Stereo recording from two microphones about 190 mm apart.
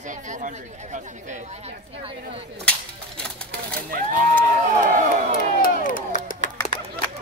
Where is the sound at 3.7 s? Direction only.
45° right (ahead or behind).